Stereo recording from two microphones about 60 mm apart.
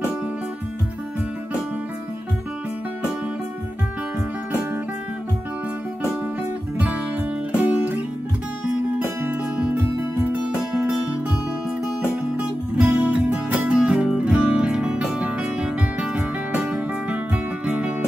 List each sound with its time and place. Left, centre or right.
7.6 s music: right
12.4 s music: right